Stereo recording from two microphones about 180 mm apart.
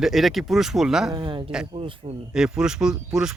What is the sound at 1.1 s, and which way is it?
Speech, 25° right (ahead or behind).